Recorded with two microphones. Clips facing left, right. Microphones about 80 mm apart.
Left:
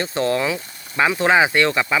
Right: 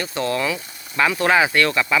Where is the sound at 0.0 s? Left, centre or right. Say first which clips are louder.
Left 2 dB; left.